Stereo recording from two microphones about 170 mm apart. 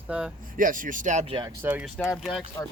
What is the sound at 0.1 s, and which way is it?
Speech, 10° right (ahead or behind).